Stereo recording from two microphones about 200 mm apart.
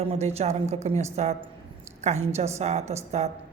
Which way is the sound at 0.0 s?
30° right (ahead or behind).